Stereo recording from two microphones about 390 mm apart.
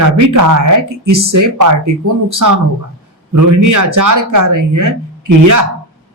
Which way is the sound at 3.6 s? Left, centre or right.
Right.